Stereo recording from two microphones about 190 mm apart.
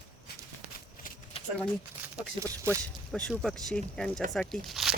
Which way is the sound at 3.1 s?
5° left (ahead or behind).